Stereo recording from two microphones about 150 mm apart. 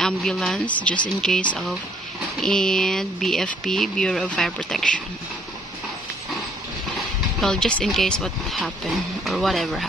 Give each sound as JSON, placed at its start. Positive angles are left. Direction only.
{"t": 0.0, "sound": "speech", "side_deg": 0}
{"t": 7.0, "sound": "speech", "side_deg": 5}